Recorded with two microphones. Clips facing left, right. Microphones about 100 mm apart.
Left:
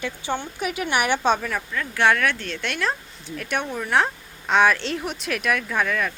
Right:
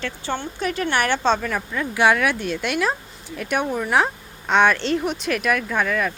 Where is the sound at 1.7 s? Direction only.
15° right (ahead or behind).